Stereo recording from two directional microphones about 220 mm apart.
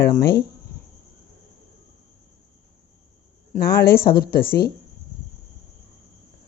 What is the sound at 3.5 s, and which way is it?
Speech, 45° left (ahead or behind).